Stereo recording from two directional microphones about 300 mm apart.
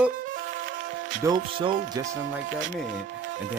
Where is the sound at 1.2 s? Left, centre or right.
Centre.